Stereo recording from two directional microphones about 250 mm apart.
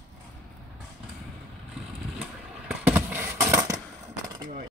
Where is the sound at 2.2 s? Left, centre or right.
Centre.